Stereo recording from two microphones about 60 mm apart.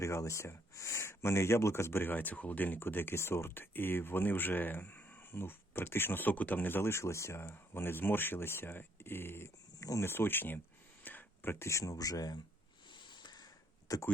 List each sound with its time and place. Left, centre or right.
0.0 s speech: left
6.9 s speech: left
7.4 s speech: left
9.7 s a sound: left
10.0 s speech: left
11.0 s a sound: left
11.6 s speech: left
13.9 s speech: left